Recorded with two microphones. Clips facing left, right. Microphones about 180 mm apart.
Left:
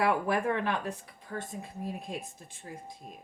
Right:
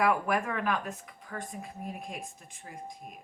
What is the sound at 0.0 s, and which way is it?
Speech, 30° left (ahead or behind).